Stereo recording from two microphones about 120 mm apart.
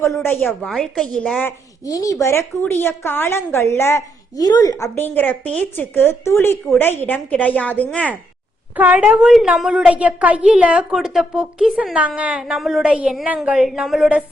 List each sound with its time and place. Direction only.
0.0 s speech: 20° left (ahead or behind)
0.7 s a woman's voice: 5° left (ahead or behind)
1.9 s a woman's voice: 30° left (ahead or behind)
4.9 s speech: 15° left (ahead or behind)
8.7 s a woman's voice: 15° right (ahead or behind)